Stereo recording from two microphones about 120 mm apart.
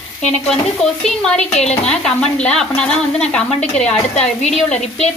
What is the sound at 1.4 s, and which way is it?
Speech, 65° left (ahead or behind).